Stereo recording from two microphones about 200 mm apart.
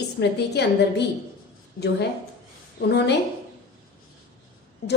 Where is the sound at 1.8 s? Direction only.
45° left (ahead or behind).